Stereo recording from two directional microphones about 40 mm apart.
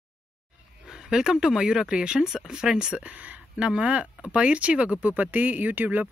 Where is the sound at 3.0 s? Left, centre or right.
Right.